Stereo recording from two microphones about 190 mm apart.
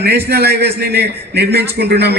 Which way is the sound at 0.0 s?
60° right (ahead or behind).